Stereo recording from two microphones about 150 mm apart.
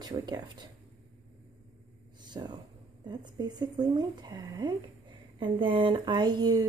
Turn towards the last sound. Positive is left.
turn(degrees=-25)  # may be behind; listen again after turning